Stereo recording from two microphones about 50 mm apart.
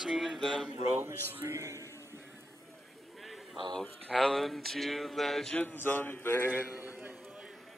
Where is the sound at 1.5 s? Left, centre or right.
Right.